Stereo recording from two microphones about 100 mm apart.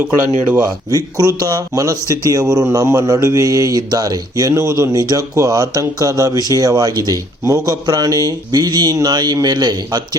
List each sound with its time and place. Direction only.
0.9 s speech: 35° right (ahead or behind)